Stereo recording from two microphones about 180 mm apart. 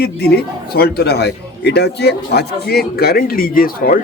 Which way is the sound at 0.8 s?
60° left (ahead or behind).